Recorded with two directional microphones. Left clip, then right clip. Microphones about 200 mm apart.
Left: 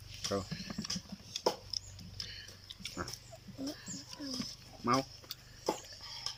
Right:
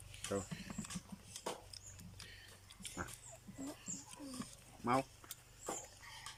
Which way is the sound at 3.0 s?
Centre (ahead or behind).